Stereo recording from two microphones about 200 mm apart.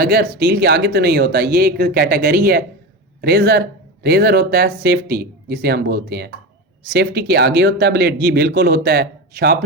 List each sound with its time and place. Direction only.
0.0 s speech: 50° right (ahead or behind)